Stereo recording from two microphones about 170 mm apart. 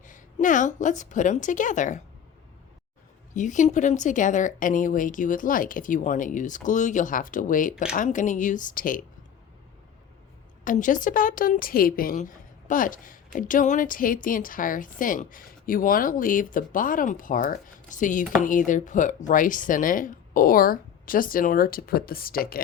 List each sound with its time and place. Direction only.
0.0 s a woman's voice: 50° left (ahead or behind)
3.3 s a woman's voice: 45° left (ahead or behind)
10.6 s a woman's voice: 50° left (ahead or behind)